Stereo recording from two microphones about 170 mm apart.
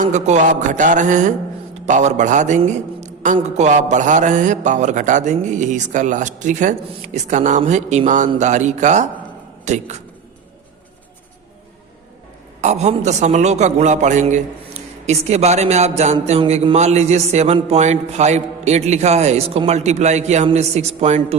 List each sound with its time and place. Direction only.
0.0 s a man's voice: 45° right (ahead or behind)
12.6 s a man's voice: 40° right (ahead or behind)